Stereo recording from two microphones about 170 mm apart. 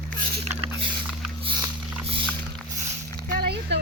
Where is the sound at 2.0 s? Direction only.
30° right (ahead or behind).